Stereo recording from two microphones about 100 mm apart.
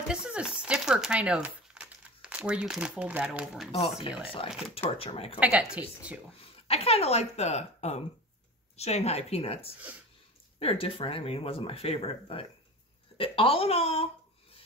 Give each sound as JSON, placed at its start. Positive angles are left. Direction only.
{"t": 0.1, "sound": "speech", "side_deg": -10}
{"t": 4.5, "sound": "speech", "side_deg": -5}
{"t": 4.7, "sound": "speech", "side_deg": 75}
{"t": 5.4, "sound": "a woman's voice", "side_deg": -10}
{"t": 6.3, "sound": "speech", "side_deg": 80}
{"t": 10.6, "sound": "speech", "side_deg": 65}